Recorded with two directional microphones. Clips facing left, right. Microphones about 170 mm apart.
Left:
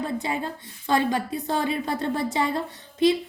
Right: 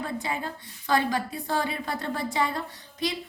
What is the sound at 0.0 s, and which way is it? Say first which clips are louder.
A woman's voice: left 4 dB; 25° left (ahead or behind).